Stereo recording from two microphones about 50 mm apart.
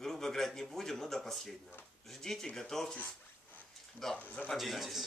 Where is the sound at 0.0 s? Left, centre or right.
Centre.